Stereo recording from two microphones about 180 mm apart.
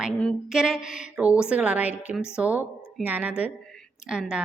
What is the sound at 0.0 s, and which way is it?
A woman's voice, centre (ahead or behind).